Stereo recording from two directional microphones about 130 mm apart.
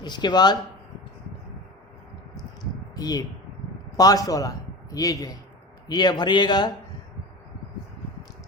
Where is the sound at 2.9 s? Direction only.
30° left (ahead or behind).